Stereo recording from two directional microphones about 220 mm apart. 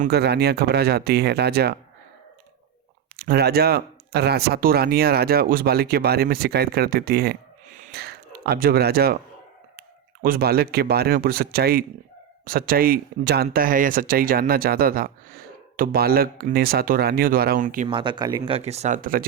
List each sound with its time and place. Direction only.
0.0 s speech: 45° right (ahead or behind)
3.2 s speech: 45° right (ahead or behind)
10.2 s speech: 40° right (ahead or behind)
17.8 s speech: 20° right (ahead or behind); by 19.2 s 35° right (ahead or behind)